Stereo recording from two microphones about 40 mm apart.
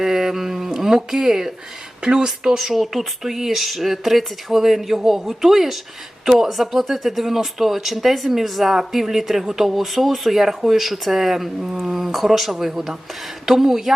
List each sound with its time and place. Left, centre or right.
0.0 s speech: centre
2.6 s speech: centre